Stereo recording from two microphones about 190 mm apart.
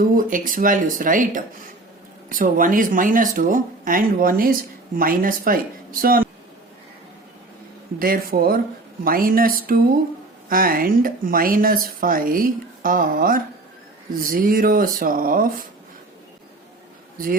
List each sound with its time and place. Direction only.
0.0 s speech: 45° right (ahead or behind)
7.9 s speech: 50° right (ahead or behind)
10.5 s speech: 50° right (ahead or behind)